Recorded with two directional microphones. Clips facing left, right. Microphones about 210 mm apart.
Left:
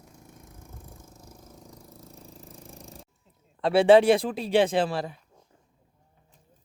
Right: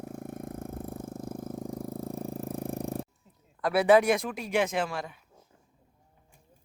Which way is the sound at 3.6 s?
30° left (ahead or behind).